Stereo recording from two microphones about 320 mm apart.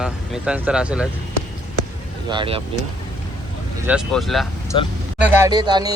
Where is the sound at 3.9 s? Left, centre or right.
Centre.